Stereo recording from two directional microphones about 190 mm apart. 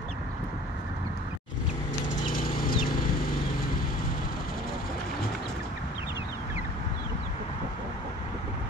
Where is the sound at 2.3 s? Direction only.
50° left (ahead or behind).